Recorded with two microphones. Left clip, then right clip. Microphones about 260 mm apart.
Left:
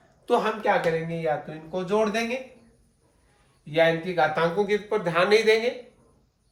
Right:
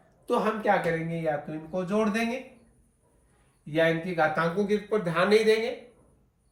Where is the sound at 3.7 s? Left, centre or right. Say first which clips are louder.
Left 3 dB; centre.